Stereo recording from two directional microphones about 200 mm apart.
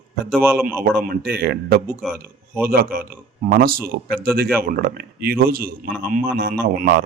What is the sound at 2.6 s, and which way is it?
Speech, 50° right (ahead or behind).